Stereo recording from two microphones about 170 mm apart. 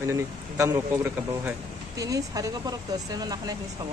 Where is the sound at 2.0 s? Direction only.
20° right (ahead or behind).